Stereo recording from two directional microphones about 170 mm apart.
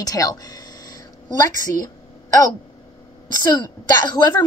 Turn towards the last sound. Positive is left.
turn(degrees=25)  # may be behind; listen again after turning